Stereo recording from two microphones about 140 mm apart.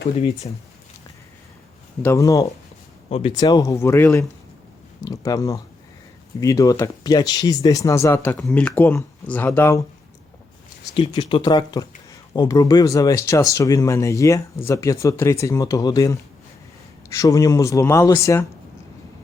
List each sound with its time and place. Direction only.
2.0 s speech: 20° left (ahead or behind)
3.1 s speech: 45° left (ahead or behind)
3.3 s speech: 25° left (ahead or behind)
10.9 s speech: 35° left (ahead or behind); by 18.4 s 20° left (ahead or behind)